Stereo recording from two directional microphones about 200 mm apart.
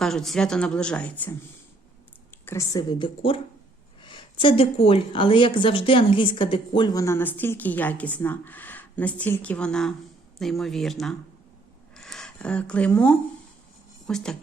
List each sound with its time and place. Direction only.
0.0 s a woman's voice: centre (ahead or behind)
2.4 s a woman's voice: 15° left (ahead or behind)
11.9 s a sound: 5° left (ahead or behind)
14.1 s a woman's voice: 5° left (ahead or behind)